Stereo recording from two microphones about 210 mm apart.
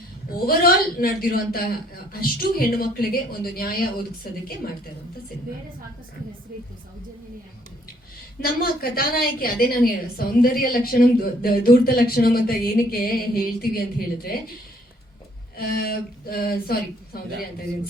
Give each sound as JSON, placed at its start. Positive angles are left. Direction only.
{"t": 0.3, "sound": "a woman's voice", "side_deg": 45}
{"t": 8.4, "sound": "a woman's voice", "side_deg": 45}
{"t": 15.5, "sound": "a woman's voice", "side_deg": 45}